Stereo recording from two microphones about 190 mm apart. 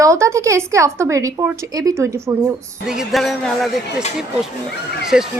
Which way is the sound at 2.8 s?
5° right (ahead or behind).